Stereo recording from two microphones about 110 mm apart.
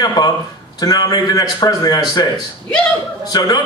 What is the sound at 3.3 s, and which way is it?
Speech, 35° left (ahead or behind).